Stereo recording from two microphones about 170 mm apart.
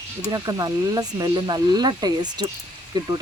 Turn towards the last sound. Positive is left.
turn(degrees=-25)  # may be behind; listen again after turning